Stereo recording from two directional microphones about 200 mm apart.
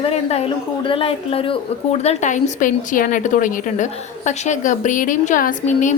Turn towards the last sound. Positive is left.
turn(degrees=40)  # may be behind; listen again after turning